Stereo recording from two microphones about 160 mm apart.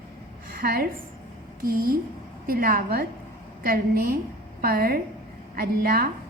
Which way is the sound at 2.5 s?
65° right (ahead or behind).